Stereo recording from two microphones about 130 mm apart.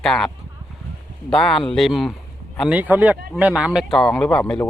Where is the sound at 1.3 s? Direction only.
5° left (ahead or behind).